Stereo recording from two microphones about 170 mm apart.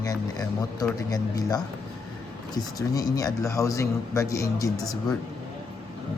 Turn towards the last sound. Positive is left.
turn(degrees=20)  # may be behind; listen again after turning